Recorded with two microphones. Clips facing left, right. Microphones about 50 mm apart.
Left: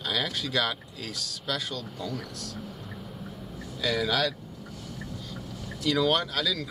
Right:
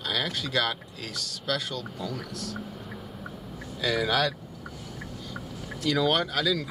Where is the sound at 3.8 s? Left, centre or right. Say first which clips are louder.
Right 1 dB; centre.